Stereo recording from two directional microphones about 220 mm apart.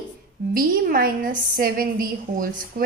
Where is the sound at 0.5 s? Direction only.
40° right (ahead or behind).